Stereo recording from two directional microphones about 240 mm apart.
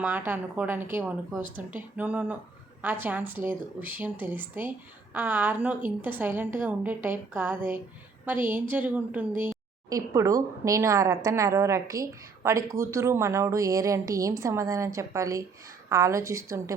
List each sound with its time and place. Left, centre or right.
0.0 s a woman's voice: centre